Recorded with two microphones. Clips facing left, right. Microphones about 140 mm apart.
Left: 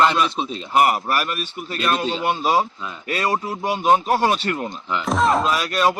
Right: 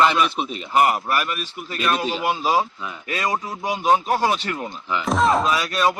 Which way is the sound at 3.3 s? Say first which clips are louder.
Left 2 dB; 10° left (ahead or behind).